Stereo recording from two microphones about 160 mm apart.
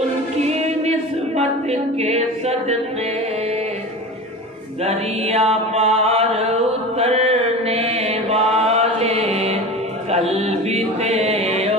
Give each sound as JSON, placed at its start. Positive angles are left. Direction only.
{"t": 1.4, "sound": "mantra", "side_deg": -40}
{"t": 4.8, "sound": "mantra", "side_deg": -40}
{"t": 10.1, "sound": "chant", "side_deg": -40}